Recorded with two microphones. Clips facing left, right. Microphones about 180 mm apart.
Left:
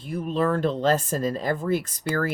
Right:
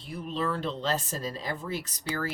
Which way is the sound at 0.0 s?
50° left (ahead or behind).